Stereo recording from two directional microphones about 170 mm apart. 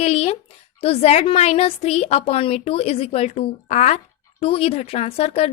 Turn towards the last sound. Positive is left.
turn(degrees=35)  # may be behind; listen again after turning